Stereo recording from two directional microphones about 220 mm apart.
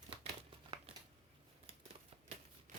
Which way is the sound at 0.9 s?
25° right (ahead or behind).